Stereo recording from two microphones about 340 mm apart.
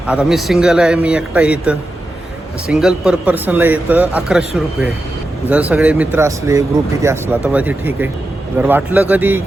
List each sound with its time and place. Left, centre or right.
0.1 s speech: centre